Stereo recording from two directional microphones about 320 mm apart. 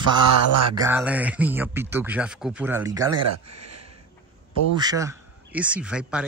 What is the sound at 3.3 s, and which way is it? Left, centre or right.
Speech, right.